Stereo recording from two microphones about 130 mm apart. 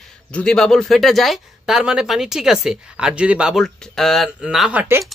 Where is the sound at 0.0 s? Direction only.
5° left (ahead or behind); by 5.0 s 15° right (ahead or behind).